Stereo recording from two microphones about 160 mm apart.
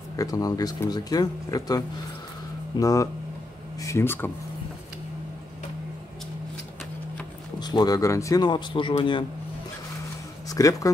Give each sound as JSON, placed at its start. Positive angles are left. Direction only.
{"t": 0.1, "sound": "speech", "side_deg": 20}
{"t": 7.6, "sound": "speech", "side_deg": 25}
{"t": 10.5, "sound": "speech", "side_deg": 20}